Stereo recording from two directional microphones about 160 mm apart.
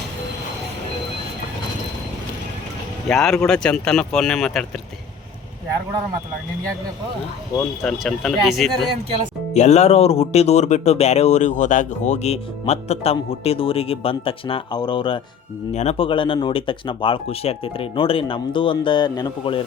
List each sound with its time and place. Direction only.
3.1 s speech: centre (ahead or behind)
7.9 s speech: centre (ahead or behind)
9.6 s speech: 45° left (ahead or behind)
15.7 s speech: 45° left (ahead or behind)